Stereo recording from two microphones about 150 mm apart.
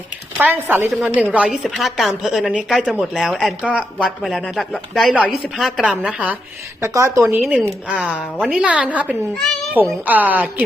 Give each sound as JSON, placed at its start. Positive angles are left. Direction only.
{"t": 0.3, "sound": "speech", "side_deg": -10}
{"t": 6.8, "sound": "a woman's voice", "side_deg": -20}